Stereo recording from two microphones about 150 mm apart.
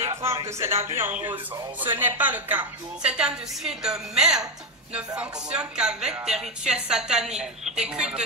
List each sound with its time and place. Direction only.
0.0 s a woman's voice: 20° right (ahead or behind)